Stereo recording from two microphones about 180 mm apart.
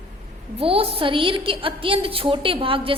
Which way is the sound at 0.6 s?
30° right (ahead or behind).